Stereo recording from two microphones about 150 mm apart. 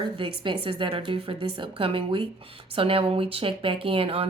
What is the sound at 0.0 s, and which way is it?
A woman's voice, 35° right (ahead or behind).